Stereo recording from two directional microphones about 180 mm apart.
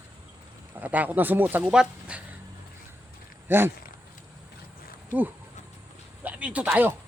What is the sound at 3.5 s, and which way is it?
Speech, 10° right (ahead or behind).